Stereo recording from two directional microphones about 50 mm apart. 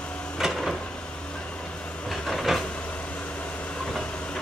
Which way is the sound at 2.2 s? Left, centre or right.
Centre.